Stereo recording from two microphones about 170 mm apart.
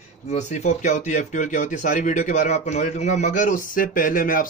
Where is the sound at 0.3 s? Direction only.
40° left (ahead or behind).